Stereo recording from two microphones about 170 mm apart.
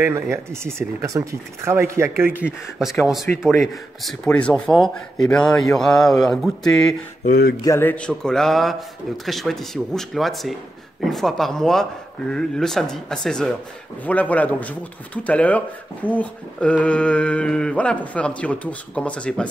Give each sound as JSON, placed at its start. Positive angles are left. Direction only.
{"t": 0.0, "sound": "speech", "side_deg": -15}
{"t": 2.8, "sound": "speech", "side_deg": 0}
{"t": 7.2, "sound": "speech", "side_deg": 60}
{"t": 7.6, "sound": "speech", "side_deg": 15}